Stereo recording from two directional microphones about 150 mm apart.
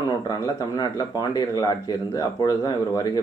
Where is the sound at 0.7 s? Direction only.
25° left (ahead or behind).